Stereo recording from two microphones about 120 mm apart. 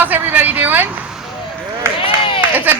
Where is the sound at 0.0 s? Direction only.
15° right (ahead or behind).